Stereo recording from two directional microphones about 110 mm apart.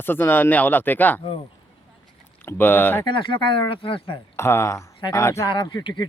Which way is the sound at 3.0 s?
45° left (ahead or behind).